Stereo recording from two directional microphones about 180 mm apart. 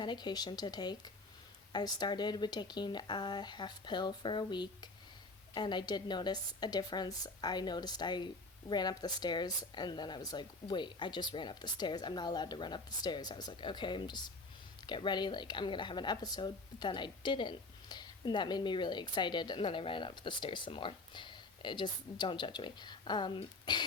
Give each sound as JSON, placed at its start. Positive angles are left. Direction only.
{"t": 0.0, "sound": "a woman's voice", "side_deg": 25}